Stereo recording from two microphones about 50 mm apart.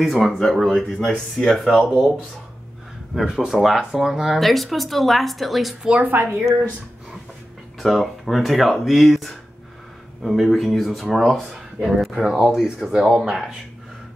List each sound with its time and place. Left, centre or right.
0.0 s speech: centre
3.2 s speech: centre
6.1 s speech: right
7.8 s speech: centre
11.5 s speech: centre
12.0 s speech: centre